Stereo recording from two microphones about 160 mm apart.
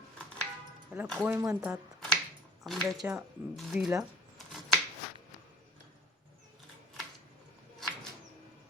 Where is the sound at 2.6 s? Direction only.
Centre (ahead or behind).